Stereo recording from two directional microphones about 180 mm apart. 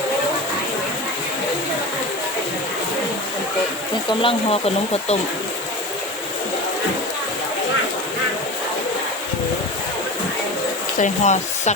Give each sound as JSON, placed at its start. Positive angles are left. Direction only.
{"t": 4.2, "sound": "speech", "side_deg": 30}
{"t": 11.0, "sound": "speech", "side_deg": 40}